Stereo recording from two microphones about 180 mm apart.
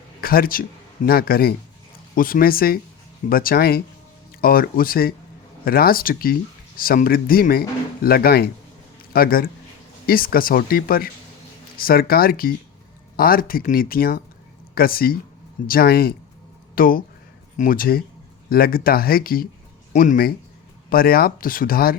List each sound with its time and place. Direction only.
0.2 s speech: 55° left (ahead or behind)